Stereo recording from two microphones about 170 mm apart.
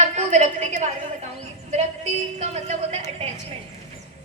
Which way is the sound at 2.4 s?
40° right (ahead or behind).